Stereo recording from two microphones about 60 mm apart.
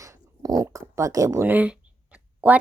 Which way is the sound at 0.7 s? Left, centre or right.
Right.